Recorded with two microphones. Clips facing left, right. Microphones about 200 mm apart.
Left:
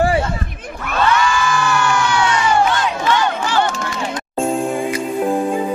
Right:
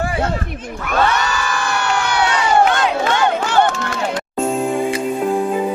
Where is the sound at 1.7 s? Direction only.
60° right (ahead or behind).